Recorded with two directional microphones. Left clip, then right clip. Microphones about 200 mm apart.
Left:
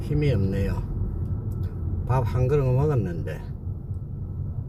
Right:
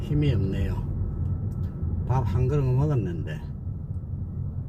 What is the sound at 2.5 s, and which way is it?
Speech, 20° left (ahead or behind).